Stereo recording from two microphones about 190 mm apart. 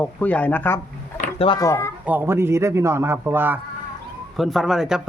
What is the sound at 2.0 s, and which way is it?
Speech, 10° right (ahead or behind).